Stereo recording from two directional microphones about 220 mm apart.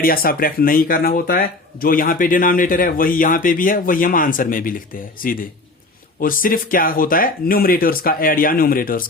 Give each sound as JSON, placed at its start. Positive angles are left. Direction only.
{"t": 0.0, "sound": "speech", "side_deg": 40}
{"t": 6.1, "sound": "speech", "side_deg": 40}